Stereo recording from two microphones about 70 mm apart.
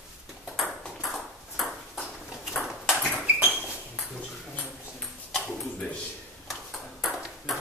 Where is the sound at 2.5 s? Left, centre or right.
Centre.